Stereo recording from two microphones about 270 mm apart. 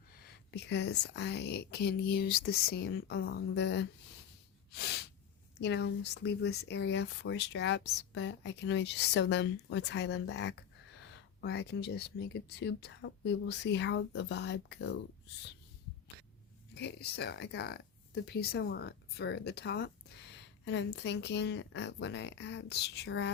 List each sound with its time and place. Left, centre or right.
0.2 s speech: left
4.7 s snort: left
5.5 s speech: left
16.7 s speech: left